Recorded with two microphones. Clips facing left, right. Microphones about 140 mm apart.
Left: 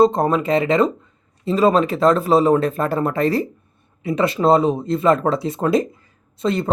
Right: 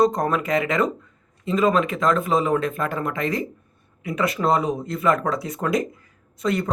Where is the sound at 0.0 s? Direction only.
25° left (ahead or behind).